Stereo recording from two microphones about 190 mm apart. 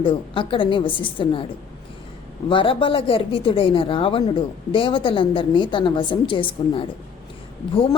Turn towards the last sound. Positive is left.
turn(degrees=30)  # may be behind; listen again after turning